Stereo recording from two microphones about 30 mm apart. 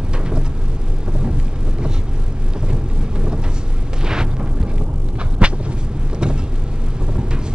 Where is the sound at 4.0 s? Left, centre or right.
Right.